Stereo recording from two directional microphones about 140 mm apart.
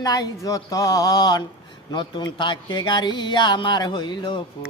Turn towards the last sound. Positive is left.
turn(degrees=30)  # may be behind; listen again after turning